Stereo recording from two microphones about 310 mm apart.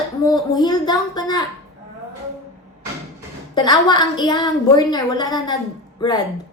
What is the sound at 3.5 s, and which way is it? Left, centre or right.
A woman's voice, centre.